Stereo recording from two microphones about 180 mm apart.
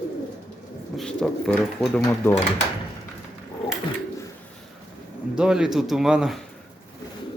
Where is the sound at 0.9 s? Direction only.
5° left (ahead or behind).